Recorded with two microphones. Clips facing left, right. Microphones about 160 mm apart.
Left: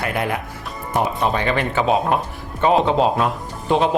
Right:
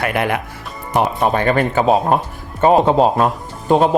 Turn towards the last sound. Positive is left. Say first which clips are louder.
# right 4 dB
turn(degrees=-45)  # may be behind; listen again after turning